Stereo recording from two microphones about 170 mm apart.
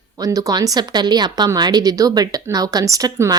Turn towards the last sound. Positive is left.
turn(degrees=-20)  # may be behind; listen again after turning